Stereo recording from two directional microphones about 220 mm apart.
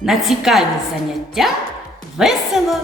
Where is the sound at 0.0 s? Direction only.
Centre (ahead or behind).